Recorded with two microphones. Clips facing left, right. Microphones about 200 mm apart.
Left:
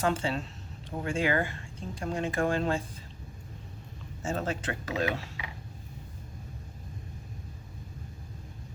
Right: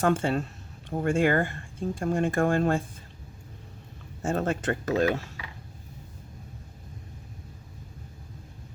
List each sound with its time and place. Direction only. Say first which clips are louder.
0.0 s speech: right 5 dB; 50° right (ahead or behind)
4.2 s speech: right 5 dB; 50° right (ahead or behind)